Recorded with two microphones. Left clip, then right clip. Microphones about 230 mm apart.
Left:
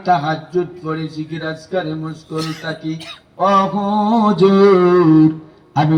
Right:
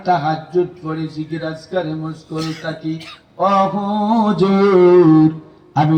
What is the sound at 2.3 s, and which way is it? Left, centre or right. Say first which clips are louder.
Speech: left 1 dB; centre.